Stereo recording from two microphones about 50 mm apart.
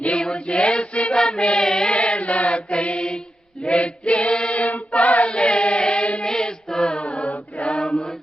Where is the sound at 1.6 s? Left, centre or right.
Centre.